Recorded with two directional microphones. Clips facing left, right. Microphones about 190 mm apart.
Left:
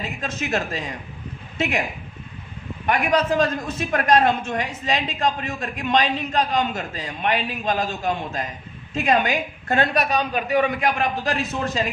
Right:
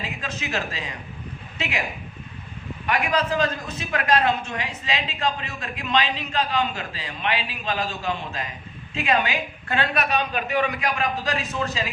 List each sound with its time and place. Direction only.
0.2 s a woman's voice: 45° left (ahead or behind)
2.8 s a woman's voice: 45° left (ahead or behind)